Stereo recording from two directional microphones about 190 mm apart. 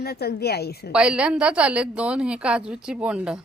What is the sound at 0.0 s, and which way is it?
Speech, 55° left (ahead or behind).